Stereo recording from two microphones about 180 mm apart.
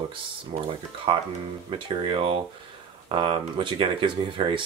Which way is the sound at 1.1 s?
30° right (ahead or behind).